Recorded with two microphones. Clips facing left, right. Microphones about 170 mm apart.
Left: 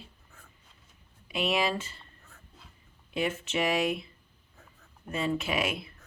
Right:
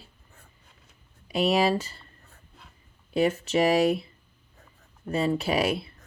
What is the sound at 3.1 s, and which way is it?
Speech, 40° right (ahead or behind).